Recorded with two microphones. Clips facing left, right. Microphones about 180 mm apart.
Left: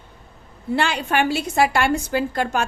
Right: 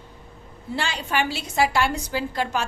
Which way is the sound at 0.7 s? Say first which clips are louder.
Left 5 dB; 60° left (ahead or behind).